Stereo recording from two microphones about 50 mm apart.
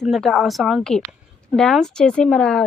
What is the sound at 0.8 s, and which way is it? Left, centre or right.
Speech, centre.